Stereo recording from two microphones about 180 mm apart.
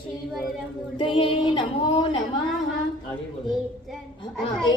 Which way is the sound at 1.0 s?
30° left (ahead or behind).